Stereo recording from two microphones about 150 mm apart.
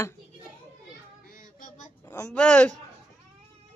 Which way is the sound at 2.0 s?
20° left (ahead or behind).